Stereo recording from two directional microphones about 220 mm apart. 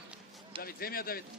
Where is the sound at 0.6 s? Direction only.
40° left (ahead or behind).